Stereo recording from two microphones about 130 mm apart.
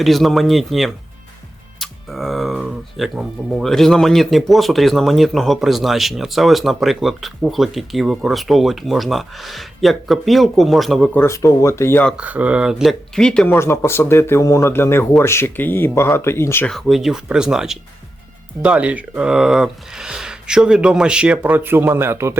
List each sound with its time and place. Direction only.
0.0 s speech: centre (ahead or behind)
11.1 s speech: 20° left (ahead or behind)
12.1 s speech: 10° right (ahead or behind); by 13.6 s 5° left (ahead or behind)
13.6 s speech: 20° left (ahead or behind)
16.6 s speech: centre (ahead or behind); by 22.4 s 20° right (ahead or behind)